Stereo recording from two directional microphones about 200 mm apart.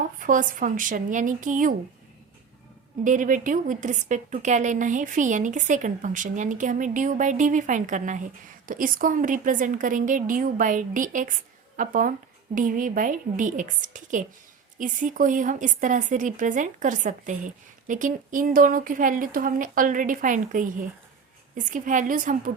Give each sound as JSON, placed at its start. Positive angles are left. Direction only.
{"t": 0.2, "sound": "a woman's voice", "side_deg": -40}
{"t": 3.0, "sound": "a woman's voice", "side_deg": -40}